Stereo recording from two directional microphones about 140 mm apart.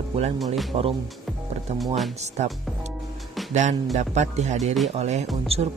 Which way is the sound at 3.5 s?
60° right (ahead or behind).